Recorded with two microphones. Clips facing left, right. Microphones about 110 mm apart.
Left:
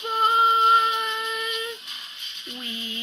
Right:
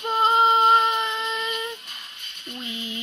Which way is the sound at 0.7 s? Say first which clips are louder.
Right 1 dB; centre (ahead or behind).